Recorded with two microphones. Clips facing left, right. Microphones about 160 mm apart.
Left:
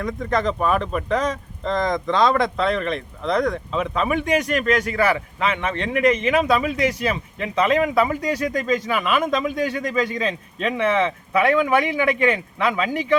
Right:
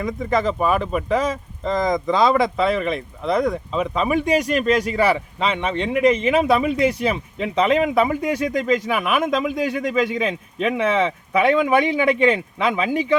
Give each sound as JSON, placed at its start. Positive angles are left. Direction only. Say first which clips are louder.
{"t": 0.0, "sound": "speech", "louder": "right 1 dB", "side_deg": -5}
{"t": 5.4, "sound": "speech", "louder": "right 1 dB", "side_deg": -15}
{"t": 11.9, "sound": "speech", "louder": "right 3 dB", "side_deg": -25}